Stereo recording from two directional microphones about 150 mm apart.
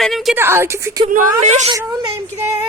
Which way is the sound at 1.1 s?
50° right (ahead or behind).